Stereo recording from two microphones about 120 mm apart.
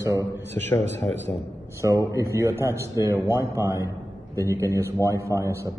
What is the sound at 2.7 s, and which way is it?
A man's voice, 25° right (ahead or behind).